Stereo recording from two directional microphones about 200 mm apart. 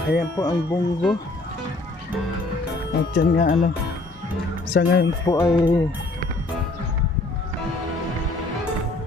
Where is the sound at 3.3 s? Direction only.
45° left (ahead or behind).